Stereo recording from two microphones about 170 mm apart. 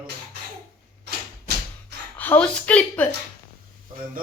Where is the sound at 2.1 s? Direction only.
10° left (ahead or behind).